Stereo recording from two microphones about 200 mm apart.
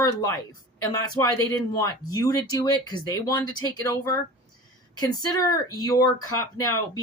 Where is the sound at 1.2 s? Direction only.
15° left (ahead or behind).